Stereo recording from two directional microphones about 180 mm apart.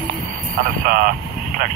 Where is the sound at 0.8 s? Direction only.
55° right (ahead or behind).